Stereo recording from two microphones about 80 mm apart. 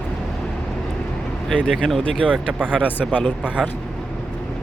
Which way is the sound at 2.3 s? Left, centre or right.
Centre.